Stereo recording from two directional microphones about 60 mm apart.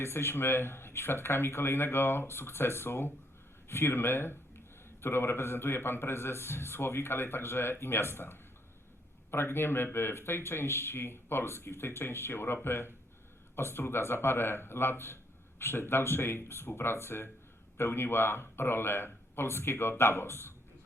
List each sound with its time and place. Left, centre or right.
0.0 s a man's voice: left